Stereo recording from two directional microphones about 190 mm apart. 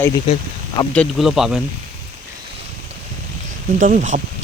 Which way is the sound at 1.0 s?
Centre (ahead or behind).